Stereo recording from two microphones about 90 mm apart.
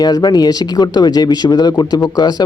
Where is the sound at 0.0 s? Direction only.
45° left (ahead or behind).